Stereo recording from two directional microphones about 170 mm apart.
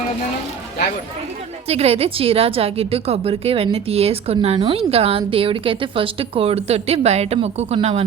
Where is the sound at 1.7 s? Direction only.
35° right (ahead or behind).